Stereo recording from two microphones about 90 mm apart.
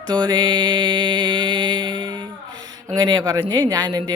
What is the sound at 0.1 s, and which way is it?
Music, 55° right (ahead or behind).